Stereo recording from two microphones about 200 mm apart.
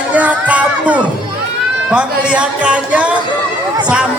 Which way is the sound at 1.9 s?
5° right (ahead or behind).